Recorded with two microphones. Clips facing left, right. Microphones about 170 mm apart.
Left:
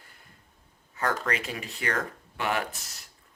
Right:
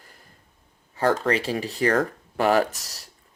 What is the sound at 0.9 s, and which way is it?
Speech, 30° right (ahead or behind).